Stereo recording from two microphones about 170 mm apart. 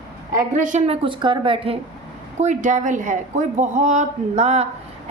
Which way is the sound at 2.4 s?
45° right (ahead or behind).